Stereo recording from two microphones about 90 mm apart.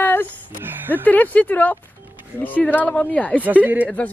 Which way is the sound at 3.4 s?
20° right (ahead or behind).